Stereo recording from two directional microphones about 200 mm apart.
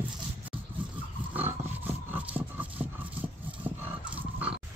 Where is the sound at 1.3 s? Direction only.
10° right (ahead or behind).